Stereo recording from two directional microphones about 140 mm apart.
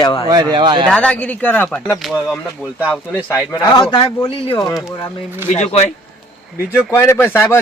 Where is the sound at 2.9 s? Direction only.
15° left (ahead or behind).